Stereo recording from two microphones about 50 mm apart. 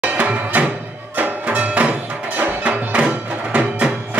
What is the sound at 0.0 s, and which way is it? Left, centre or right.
Music, right.